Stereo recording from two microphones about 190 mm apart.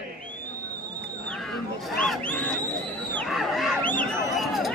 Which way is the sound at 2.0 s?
5° left (ahead or behind).